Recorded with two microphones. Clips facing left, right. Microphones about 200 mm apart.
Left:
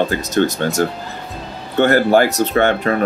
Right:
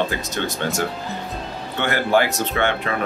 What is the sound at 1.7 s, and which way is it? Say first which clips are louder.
Speech: left 7 dB; 45° left (ahead or behind).